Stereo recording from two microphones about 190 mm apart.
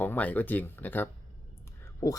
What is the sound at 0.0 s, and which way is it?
Speech, 10° left (ahead or behind).